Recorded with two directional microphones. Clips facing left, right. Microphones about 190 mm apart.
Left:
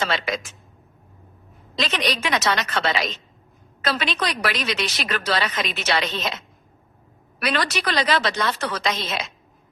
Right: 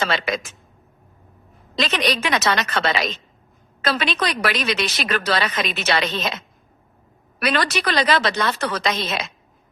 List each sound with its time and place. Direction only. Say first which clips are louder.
0.0 s a man's voice: right 2 dB; 65° right (ahead or behind)
1.7 s a woman's voice: right 3 dB; 60° right (ahead or behind)
7.3 s speech: right 3 dB; 60° right (ahead or behind)